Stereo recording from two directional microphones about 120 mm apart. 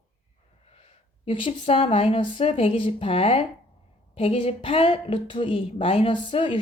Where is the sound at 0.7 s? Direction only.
50° left (ahead or behind).